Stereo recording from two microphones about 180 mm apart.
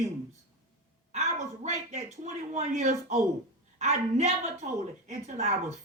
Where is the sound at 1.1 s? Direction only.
40° right (ahead or behind).